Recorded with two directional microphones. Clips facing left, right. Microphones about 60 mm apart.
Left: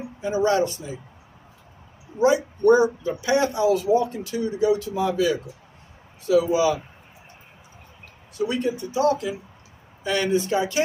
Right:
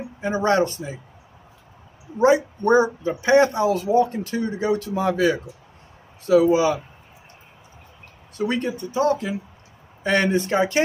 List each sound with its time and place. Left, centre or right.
0.2 s speech: right
2.1 s speech: right
8.4 s speech: right